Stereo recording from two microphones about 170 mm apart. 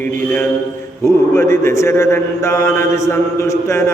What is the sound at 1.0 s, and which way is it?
Mantra, 15° left (ahead or behind).